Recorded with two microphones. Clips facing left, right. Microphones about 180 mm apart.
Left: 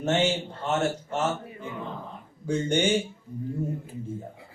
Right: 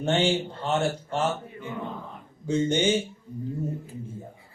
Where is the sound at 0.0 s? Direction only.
30° right (ahead or behind).